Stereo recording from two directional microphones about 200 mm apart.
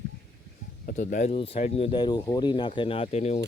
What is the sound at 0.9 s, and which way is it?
Speech, 40° left (ahead or behind).